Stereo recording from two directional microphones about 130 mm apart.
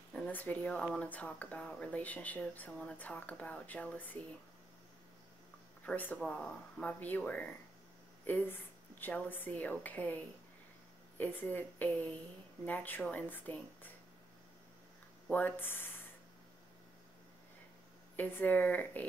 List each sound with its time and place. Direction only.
0.1 s speech: 15° left (ahead or behind)
5.9 s speech: 15° left (ahead or behind)
11.1 s speech: 15° left (ahead or behind)
15.2 s speech: 10° left (ahead or behind)
18.1 s speech: 15° left (ahead or behind)